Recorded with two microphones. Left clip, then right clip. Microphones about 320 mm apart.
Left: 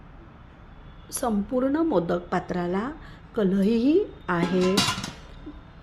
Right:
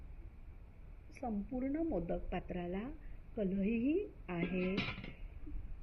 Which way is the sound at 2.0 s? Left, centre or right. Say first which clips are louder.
Left 15 dB; left.